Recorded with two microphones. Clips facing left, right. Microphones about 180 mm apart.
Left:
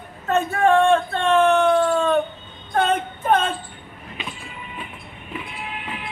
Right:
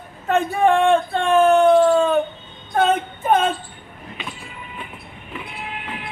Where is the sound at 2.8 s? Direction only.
10° right (ahead or behind).